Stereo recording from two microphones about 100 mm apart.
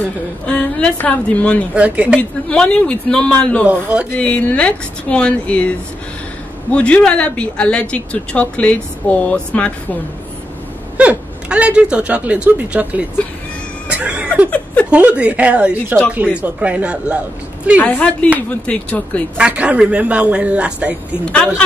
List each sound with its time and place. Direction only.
0.5 s a woman's voice: 10° left (ahead or behind)
1.8 s speech: 15° right (ahead or behind)
2.1 s speech: 10° left (ahead or behind)
3.6 s speech: 15° right (ahead or behind)
4.2 s speech: 15° left (ahead or behind)
6.7 s speech: 10° left (ahead or behind)
11.0 s speech: 10° right (ahead or behind)
13.8 s a sound: 10° right (ahead or behind)
14.5 s a sound: 15° left (ahead or behind)
14.9 s speech: 10° right (ahead or behind)
17.8 s speech: 15° left (ahead or behind)
19.3 s speech: 10° right (ahead or behind)